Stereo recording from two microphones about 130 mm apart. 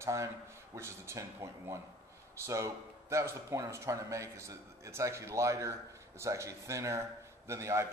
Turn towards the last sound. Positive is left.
turn(degrees=-20)  # may be behind; listen again after turning